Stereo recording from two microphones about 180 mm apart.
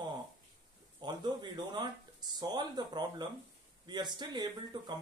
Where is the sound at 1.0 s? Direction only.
25° right (ahead or behind).